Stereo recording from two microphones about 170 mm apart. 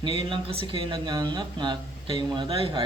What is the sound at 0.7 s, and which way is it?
Speech, 25° right (ahead or behind).